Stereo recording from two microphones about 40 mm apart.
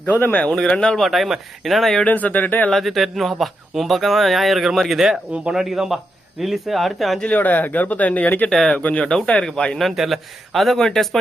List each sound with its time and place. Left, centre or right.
0.0 s speech: left
0.7 s speech: left
0.9 s speech: centre
2.0 s speech: left
2.7 s speech: centre
4.9 s speech: centre
7.3 s speech: left
8.8 s speech: left
9.4 s speech: centre
9.7 s speech: centre